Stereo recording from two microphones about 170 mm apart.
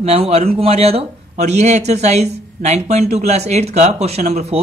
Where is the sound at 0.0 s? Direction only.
35° right (ahead or behind).